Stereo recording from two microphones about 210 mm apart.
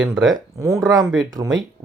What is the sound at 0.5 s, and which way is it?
Speech, 15° right (ahead or behind).